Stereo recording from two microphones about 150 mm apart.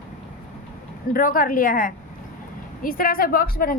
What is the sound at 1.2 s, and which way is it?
A woman's voice, 65° left (ahead or behind).